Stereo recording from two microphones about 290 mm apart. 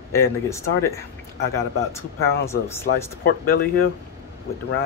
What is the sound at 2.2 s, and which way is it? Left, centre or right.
Speech, left.